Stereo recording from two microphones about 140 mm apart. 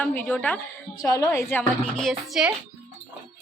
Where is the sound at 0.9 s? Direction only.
25° left (ahead or behind).